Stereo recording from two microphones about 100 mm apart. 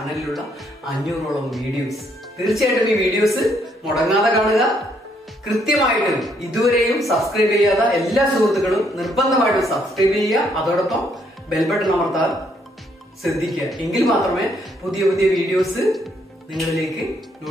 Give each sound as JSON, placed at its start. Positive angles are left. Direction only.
{"t": 0.0, "sound": "a man's voice", "side_deg": 0}
{"t": 13.2, "sound": "a man's voice", "side_deg": 0}